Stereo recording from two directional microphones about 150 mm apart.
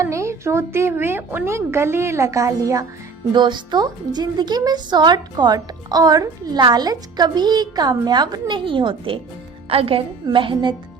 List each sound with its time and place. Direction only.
0.0 s a woman's voice: 20° right (ahead or behind)